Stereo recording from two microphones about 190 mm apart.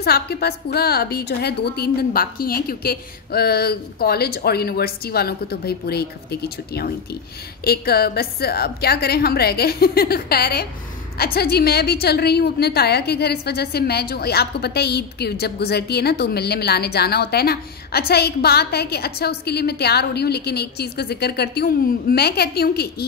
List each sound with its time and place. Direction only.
0.0 s a woman's voice: 55° left (ahead or behind)